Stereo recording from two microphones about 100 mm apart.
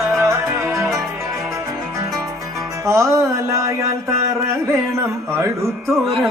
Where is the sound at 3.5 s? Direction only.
30° right (ahead or behind).